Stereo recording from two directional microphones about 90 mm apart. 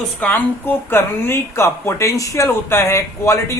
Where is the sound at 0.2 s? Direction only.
20° left (ahead or behind).